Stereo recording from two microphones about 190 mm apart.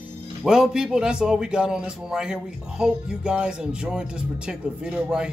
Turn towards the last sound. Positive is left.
turn(degrees=-5)  # may be behind; listen again after turning